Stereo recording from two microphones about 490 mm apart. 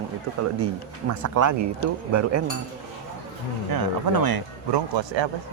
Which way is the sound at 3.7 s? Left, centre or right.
Right.